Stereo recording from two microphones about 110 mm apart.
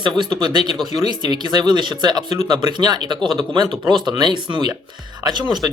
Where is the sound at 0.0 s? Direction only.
45° right (ahead or behind).